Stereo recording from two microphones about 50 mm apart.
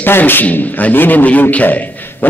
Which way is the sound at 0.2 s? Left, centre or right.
Left.